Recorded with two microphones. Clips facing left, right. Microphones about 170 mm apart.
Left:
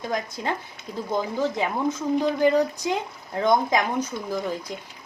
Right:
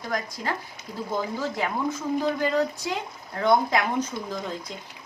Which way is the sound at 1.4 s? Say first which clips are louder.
Left 3 dB; 20° left (ahead or behind).